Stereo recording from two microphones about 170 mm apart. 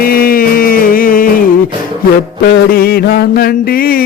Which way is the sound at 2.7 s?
65° left (ahead or behind).